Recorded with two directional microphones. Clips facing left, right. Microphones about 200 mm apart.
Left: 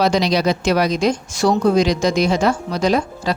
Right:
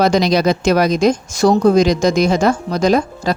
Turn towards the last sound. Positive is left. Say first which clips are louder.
# right 3 dB
turn(degrees=-45)  # may be behind; listen again after turning